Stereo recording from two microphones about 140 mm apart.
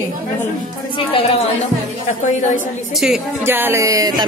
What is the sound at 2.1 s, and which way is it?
Speech, 60° left (ahead or behind).